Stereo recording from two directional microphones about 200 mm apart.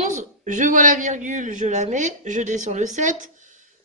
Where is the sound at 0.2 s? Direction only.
40° right (ahead or behind).